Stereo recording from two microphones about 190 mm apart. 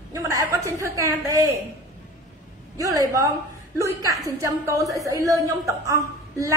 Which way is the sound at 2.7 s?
15° right (ahead or behind).